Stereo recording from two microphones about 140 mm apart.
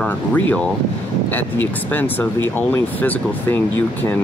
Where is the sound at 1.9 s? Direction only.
15° left (ahead or behind).